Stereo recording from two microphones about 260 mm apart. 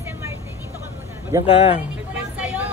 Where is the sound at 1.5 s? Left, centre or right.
Left.